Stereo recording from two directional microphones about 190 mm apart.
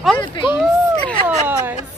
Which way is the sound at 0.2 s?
25° left (ahead or behind).